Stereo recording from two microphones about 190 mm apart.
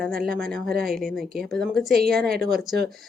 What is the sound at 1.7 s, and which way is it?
Speech, 55° right (ahead or behind).